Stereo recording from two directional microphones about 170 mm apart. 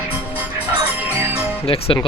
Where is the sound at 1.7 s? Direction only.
35° left (ahead or behind).